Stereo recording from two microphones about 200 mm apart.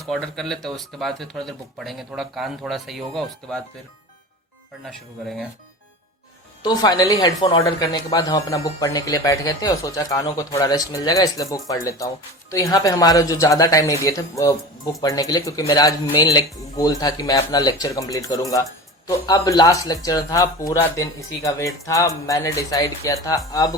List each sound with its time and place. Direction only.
0.0 s speech: centre (ahead or behind)
4.9 s speech: centre (ahead or behind)
6.6 s speech: 20° left (ahead or behind)